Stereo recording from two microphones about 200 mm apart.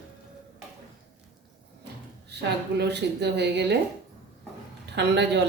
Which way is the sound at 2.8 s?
55° right (ahead or behind).